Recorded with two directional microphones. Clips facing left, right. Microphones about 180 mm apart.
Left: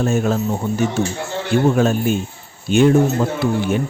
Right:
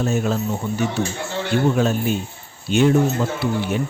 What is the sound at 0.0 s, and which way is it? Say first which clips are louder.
A man's voice: left 3 dB; 50° left (ahead or behind).